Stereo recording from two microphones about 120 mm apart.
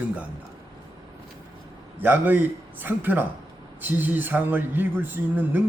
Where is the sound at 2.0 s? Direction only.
15° right (ahead or behind).